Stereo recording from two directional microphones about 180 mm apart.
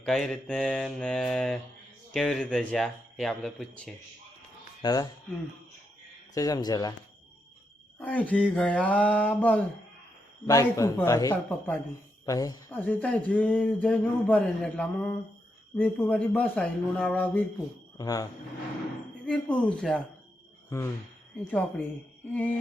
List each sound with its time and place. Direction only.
0.0 s speech: 5° left (ahead or behind)
4.8 s speech: 20° left (ahead or behind)
6.3 s speech: 20° left (ahead or behind)
7.9 s mantra: 10° left (ahead or behind)
12.2 s speech: 20° left (ahead or behind)
12.8 s mantra: 10° left (ahead or behind)
17.9 s speech: 20° left (ahead or behind)
19.2 s speech: 5° left (ahead or behind)
20.7 s mantra: 15° left (ahead or behind)
22.3 s mantra: 10° left (ahead or behind)